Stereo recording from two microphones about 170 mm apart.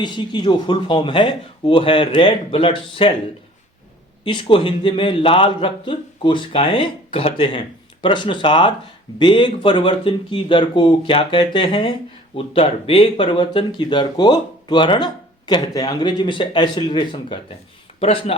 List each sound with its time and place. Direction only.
0.0 s speech: 25° left (ahead or behind)
4.2 s speech: 30° left (ahead or behind)